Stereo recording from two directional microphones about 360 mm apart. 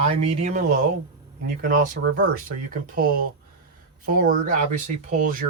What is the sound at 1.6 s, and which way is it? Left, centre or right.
Speech, right.